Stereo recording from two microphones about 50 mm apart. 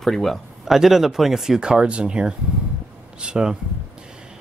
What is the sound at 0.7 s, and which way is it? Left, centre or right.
Speech, centre.